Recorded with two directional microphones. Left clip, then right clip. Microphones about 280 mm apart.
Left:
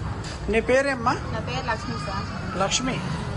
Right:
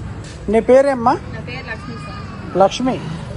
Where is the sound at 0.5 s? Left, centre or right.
Centre.